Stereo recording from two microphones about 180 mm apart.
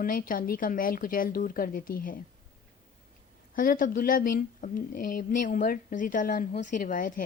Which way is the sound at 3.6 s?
50° left (ahead or behind).